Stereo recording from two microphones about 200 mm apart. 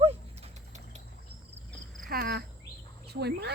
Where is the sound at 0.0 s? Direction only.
30° right (ahead or behind).